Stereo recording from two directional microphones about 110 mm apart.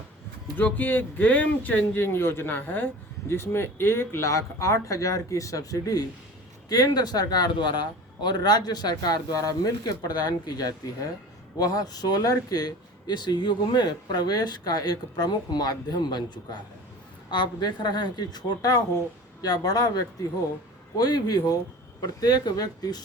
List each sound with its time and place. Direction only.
0.5 s speech: 15° left (ahead or behind); by 20.0 s 35° left (ahead or behind)
21.0 s speech: 35° left (ahead or behind)